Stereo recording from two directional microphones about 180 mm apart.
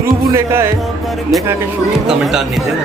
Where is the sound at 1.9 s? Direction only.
5° right (ahead or behind).